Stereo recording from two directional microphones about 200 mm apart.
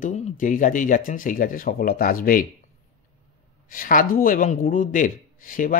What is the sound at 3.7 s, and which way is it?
A man's voice, 45° left (ahead or behind).